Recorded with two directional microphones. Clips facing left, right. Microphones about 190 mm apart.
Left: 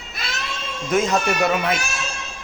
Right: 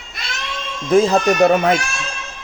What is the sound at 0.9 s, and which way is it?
Speech, 30° right (ahead or behind).